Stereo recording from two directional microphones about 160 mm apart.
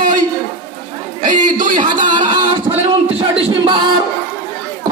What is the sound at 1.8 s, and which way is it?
Speech, 30° right (ahead or behind).